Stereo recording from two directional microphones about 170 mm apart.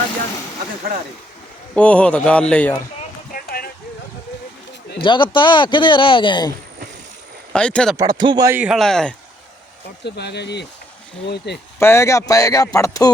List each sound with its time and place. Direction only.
1.7 s a man's voice: 5° left (ahead or behind)
3.3 s a sound: 60° left (ahead or behind)
5.0 s speech: 30° left (ahead or behind)
7.5 s speech: 5° left (ahead or behind)
7.9 s speech: 25° right (ahead or behind)
8.4 s speech: 10° right (ahead or behind)
10.0 s speech: 85° left
11.3 s speech: 75° left (ahead or behind)
11.8 s speech: 15° left (ahead or behind)